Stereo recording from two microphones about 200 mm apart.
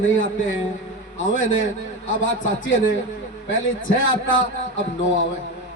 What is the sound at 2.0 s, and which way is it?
A man's voice, 75° left (ahead or behind).